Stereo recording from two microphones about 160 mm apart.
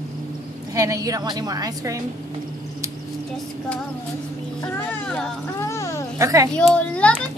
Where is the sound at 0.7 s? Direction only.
20° right (ahead or behind).